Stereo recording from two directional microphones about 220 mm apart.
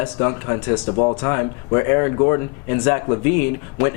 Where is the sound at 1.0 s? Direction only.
25° left (ahead or behind).